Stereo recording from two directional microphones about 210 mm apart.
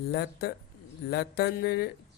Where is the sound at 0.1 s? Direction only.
50° left (ahead or behind).